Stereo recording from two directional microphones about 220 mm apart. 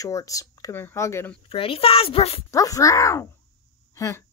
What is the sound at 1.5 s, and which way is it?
A child's voice, 25° left (ahead or behind).